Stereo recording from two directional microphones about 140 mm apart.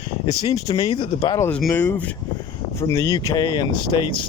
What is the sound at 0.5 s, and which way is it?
Speech, 30° left (ahead or behind).